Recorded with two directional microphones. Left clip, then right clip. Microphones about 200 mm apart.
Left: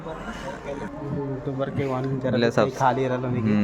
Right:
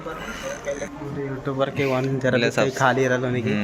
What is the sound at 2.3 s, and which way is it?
Speech, 25° left (ahead or behind).